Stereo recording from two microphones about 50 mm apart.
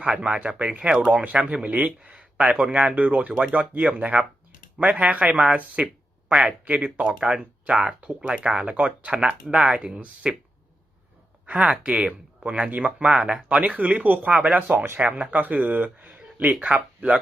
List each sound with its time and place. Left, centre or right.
0.3 s speech: right
5.8 s a sound: centre
6.7 s speech: right
7.0 s speech: centre
8.4 s speech: right
11.4 s speech: right
13.6 s speech: right